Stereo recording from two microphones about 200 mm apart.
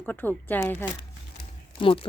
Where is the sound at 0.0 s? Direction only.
10° left (ahead or behind).